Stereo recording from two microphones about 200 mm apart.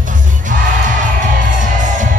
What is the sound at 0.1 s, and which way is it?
Music, 40° right (ahead or behind).